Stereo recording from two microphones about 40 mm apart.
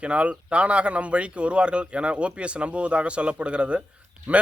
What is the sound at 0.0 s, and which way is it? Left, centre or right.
Speech, right.